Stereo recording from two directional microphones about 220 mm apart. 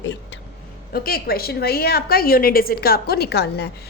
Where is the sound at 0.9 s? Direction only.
40° left (ahead or behind).